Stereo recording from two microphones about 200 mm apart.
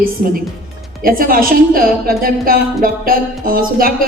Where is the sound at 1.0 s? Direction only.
45° right (ahead or behind).